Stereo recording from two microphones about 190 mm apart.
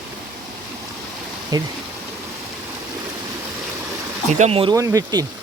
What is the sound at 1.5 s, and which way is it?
Speech, 20° right (ahead or behind).